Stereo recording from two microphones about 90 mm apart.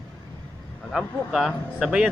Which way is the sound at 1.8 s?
10° right (ahead or behind).